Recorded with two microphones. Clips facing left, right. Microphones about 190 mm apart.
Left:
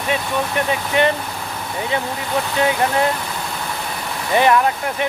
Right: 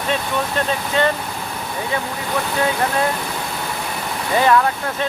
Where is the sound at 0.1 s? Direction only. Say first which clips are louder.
Left 1 dB; 15° left (ahead or behind).